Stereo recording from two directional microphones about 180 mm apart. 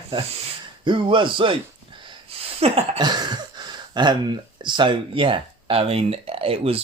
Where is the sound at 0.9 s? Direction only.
25° right (ahead or behind).